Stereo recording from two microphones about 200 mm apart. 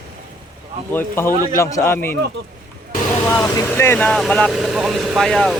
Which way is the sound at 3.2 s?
15° left (ahead or behind).